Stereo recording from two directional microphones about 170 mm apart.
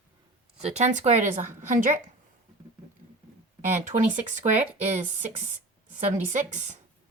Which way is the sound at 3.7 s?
45° right (ahead or behind).